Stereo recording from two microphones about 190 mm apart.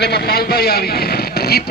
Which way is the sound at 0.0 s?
60° left (ahead or behind).